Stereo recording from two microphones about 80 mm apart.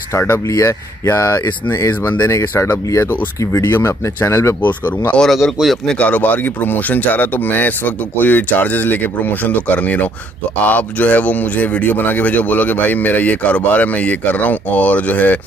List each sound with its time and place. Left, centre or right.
0.1 s speech: left
2.5 s speech: left
4.6 s speech: left
5.2 s speech: centre
5.9 s speech: centre